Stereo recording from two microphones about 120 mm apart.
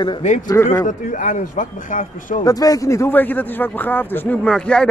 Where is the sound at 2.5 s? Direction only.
30° left (ahead or behind).